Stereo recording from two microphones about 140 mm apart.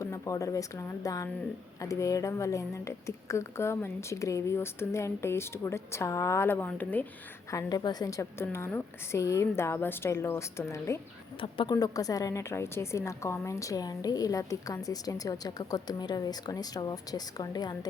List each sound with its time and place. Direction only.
0.0 s a woman's voice: 20° left (ahead or behind)
7.5 s a woman's voice: 30° left (ahead or behind)
11.3 s speech: 40° left (ahead or behind)
11.7 s a woman's voice: 25° left (ahead or behind)